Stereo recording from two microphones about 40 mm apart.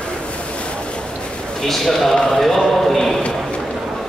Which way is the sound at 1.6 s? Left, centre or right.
Centre.